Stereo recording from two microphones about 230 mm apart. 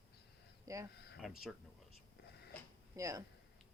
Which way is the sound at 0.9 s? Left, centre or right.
Left.